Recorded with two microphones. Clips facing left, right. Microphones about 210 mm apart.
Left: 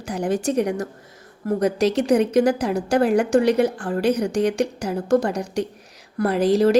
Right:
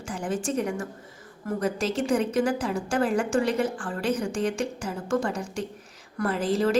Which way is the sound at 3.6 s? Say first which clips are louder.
Left 7 dB; 40° left (ahead or behind).